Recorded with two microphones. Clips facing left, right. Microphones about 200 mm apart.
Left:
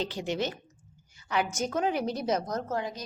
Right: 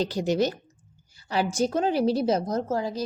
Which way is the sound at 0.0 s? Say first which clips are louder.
Right 7 dB; 40° right (ahead or behind).